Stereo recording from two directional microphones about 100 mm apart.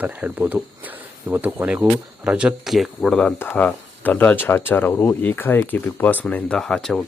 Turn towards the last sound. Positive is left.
turn(degrees=5)  # may be behind; listen again after turning